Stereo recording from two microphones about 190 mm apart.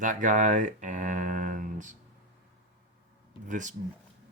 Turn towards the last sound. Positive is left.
turn(degrees=-40)  # may be behind; listen again after turning